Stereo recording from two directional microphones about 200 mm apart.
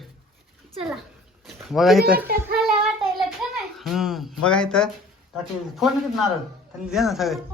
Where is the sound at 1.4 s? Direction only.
Centre (ahead or behind).